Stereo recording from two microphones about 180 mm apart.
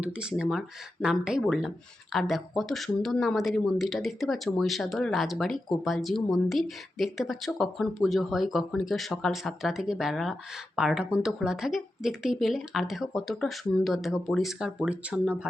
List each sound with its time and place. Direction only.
0.0 s speech: 5° right (ahead or behind)